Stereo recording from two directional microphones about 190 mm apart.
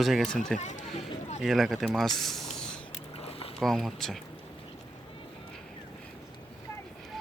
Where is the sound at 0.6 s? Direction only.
40° left (ahead or behind).